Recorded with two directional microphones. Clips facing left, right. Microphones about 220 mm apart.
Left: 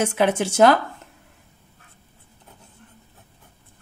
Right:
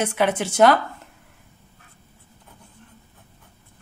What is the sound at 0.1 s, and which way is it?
Speech, 25° left (ahead or behind).